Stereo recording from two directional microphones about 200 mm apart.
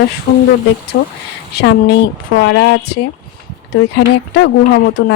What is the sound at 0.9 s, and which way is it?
Speech, 75° left (ahead or behind).